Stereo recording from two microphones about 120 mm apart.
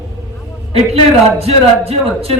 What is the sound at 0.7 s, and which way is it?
A man's voice, 60° right (ahead or behind).